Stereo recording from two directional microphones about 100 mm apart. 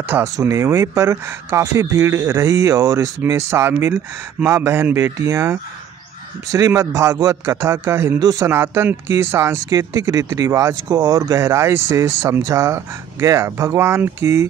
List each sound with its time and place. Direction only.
0.2 s a man's voice: 30° right (ahead or behind)
8.2 s a man's voice: 40° right (ahead or behind)
8.5 s speech: 25° right (ahead or behind)